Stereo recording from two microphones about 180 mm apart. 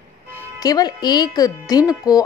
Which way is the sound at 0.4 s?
20° left (ahead or behind).